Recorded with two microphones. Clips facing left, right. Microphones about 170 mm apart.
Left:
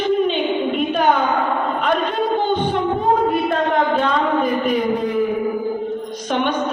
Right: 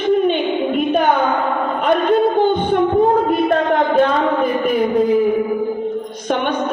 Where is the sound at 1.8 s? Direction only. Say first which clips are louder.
Right 9 dB; 55° right (ahead or behind).